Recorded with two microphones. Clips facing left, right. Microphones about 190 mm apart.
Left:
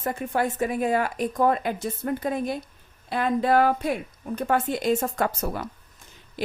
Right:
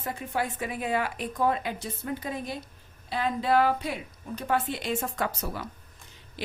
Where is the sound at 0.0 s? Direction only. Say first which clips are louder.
Left 5 dB; 50° left (ahead or behind).